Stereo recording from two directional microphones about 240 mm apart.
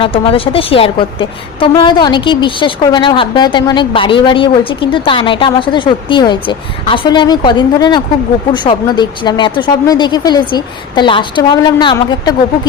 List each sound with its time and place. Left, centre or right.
0.0 s a woman's voice: left